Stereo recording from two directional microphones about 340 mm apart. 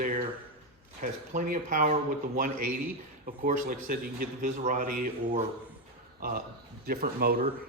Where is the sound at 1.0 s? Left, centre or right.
Right.